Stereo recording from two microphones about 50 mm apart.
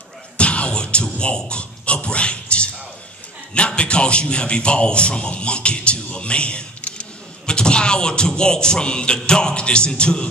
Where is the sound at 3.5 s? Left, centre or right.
Left.